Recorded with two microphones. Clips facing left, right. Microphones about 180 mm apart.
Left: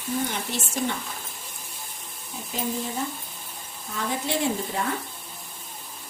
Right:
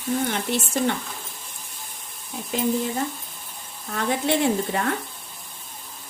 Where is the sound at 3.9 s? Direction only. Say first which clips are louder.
Right 5 dB; 65° right (ahead or behind).